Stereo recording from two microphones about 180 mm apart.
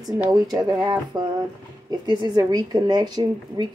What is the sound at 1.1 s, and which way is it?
A woman's voice, 25° right (ahead or behind).